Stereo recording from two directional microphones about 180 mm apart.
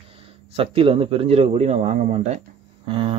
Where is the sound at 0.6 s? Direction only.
30° right (ahead or behind).